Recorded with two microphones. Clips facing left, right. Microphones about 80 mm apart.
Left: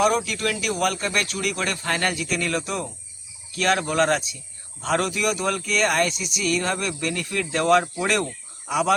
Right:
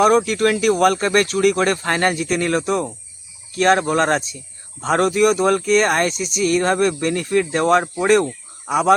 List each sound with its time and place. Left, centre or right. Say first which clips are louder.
0.0 s speech: right 7 dB; right